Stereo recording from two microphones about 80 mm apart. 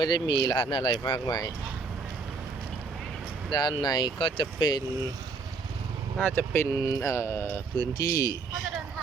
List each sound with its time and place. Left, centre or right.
0.0 s speech: left
3.5 s speech: left
6.1 s speech: left
6.7 s mantra: left
7.0 s speech: left
7.8 s speech: left